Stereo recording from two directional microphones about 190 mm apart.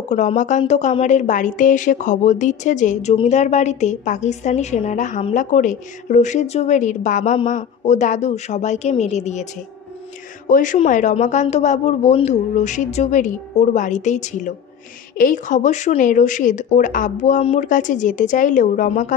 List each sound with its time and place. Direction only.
0.1 s a woman's voice: 40° left (ahead or behind)
10.5 s a woman's voice: 40° left (ahead or behind)